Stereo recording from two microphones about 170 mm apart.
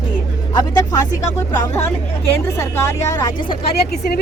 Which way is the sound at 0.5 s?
20° left (ahead or behind).